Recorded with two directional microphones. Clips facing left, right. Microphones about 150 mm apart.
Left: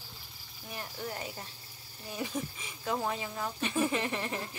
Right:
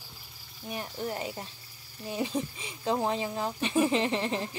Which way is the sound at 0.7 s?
20° right (ahead or behind).